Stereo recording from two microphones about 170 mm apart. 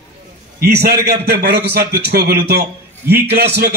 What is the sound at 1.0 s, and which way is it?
A man's voice, 75° right (ahead or behind).